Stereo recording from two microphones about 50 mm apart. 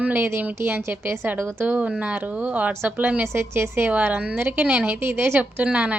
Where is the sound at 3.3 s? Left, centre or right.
Right.